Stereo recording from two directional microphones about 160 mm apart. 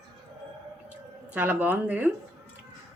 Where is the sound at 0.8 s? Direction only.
10° right (ahead or behind).